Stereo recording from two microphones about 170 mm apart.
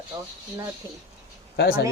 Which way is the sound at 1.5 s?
60° left (ahead or behind).